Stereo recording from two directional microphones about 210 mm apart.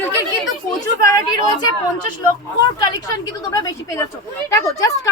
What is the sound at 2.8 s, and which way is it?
A woman's voice, 15° left (ahead or behind).